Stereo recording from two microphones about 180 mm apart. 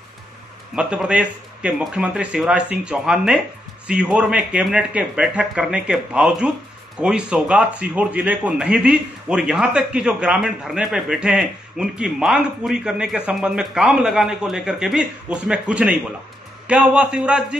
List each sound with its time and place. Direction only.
0.7 s a man's voice: 5° right (ahead or behind)